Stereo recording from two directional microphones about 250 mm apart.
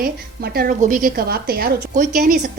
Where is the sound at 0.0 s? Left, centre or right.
Right.